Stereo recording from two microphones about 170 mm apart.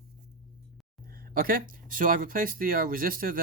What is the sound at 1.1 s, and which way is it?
Speech, 60° right (ahead or behind).